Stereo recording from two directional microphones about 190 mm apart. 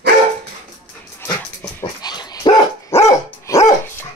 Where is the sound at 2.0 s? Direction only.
20° left (ahead or behind).